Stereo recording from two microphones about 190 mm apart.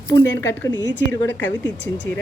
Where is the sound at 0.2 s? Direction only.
15° left (ahead or behind).